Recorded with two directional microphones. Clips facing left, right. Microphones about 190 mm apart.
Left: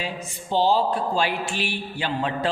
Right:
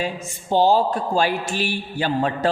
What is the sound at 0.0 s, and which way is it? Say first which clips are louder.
Speech: right 4 dB; 45° right (ahead or behind).